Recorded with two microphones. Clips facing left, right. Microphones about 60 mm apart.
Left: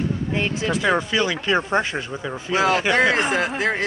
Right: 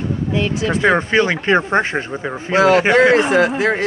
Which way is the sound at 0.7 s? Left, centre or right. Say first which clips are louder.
Right 5 dB; right.